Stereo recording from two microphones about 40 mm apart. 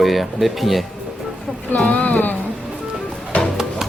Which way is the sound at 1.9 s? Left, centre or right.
Left.